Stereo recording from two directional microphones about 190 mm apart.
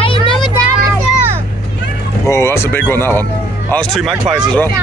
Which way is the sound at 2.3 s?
15° left (ahead or behind).